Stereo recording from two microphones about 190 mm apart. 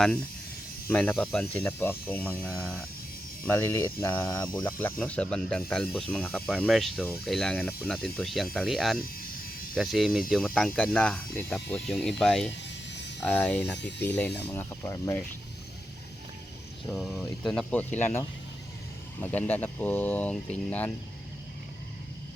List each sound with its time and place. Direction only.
0.9 s speech: 10° left (ahead or behind)
12.6 s a sound: 65° left (ahead or behind)
13.2 s speech: 10° left (ahead or behind)
16.9 s speech: centre (ahead or behind)